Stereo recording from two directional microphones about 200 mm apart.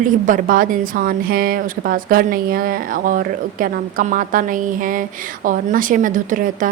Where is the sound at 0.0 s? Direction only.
40° right (ahead or behind).